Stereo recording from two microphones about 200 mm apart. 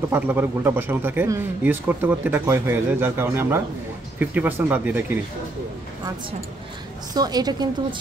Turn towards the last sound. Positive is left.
turn(degrees=-20)  # may be behind; listen again after turning